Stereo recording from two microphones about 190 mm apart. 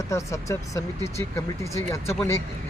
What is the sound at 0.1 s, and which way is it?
Speech, 15° left (ahead or behind).